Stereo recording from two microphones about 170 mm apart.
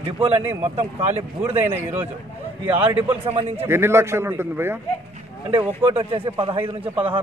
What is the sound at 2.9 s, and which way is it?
Speech, 35° right (ahead or behind).